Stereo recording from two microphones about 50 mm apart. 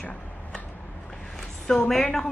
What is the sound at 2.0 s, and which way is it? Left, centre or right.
Speech, centre.